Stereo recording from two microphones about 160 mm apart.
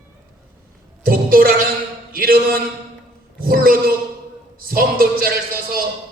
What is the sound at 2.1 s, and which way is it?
Mantra, 65° right (ahead or behind).